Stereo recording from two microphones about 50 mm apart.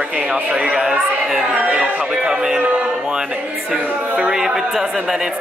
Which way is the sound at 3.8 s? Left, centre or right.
Right.